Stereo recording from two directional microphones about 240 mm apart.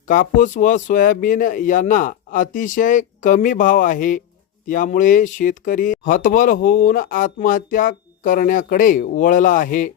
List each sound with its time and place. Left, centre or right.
0.1 s speech: left